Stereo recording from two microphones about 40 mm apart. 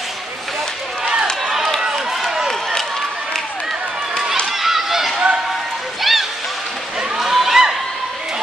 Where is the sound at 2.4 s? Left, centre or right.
Centre.